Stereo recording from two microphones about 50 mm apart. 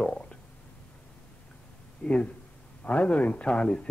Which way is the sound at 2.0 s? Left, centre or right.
Centre.